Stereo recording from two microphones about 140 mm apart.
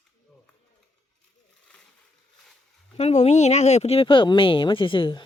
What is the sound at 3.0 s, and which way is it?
Speech, 50° left (ahead or behind).